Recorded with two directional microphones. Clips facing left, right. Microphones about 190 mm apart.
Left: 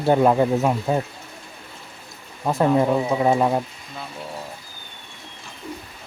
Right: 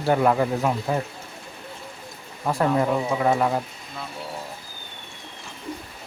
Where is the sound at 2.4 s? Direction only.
20° left (ahead or behind).